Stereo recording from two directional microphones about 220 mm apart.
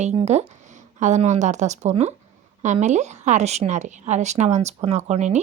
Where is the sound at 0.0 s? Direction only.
30° right (ahead or behind).